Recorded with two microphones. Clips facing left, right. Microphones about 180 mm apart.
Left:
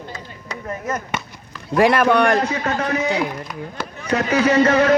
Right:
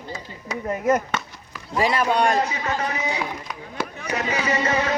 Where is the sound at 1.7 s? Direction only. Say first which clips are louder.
Left 6 dB; 60° left (ahead or behind).